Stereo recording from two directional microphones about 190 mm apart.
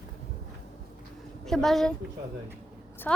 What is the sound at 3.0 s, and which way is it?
Speech, 10° left (ahead or behind).